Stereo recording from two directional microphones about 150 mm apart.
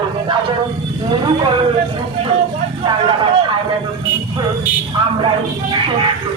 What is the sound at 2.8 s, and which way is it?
Speech, 30° right (ahead or behind).